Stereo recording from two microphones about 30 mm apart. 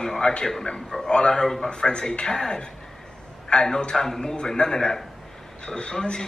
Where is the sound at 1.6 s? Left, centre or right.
Left.